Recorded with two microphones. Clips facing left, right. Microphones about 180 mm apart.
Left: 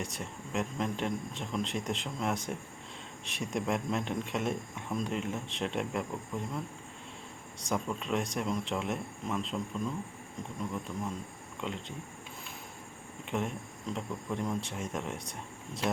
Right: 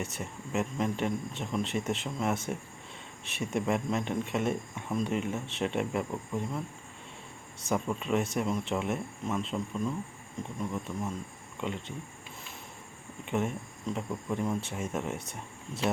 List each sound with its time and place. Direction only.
0.0 s speech: 5° right (ahead or behind)
7.6 s speech: 5° right (ahead or behind)
13.2 s speech: 5° right (ahead or behind)